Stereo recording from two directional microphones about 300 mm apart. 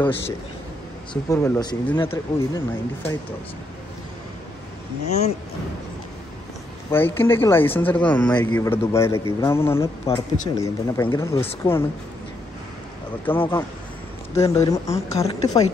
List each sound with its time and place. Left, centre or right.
1.1 s speech: centre
6.9 s speech: centre
10.0 s speech: left
10.6 s speech: centre
13.2 s speech: centre
14.3 s speech: centre